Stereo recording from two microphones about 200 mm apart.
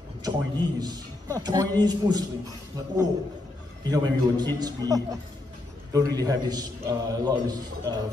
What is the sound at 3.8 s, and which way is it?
A man's voice, 20° right (ahead or behind).